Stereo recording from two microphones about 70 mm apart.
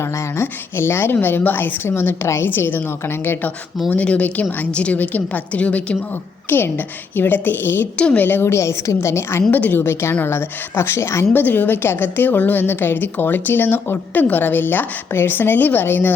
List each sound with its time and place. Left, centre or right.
0.0 s a woman's voice: left
3.8 s a woman's voice: centre
6.5 s a woman's voice: left
7.9 s a woman's voice: centre
8.2 s a woman's voice: left
9.5 s a woman's voice: left
11.3 s a woman's voice: left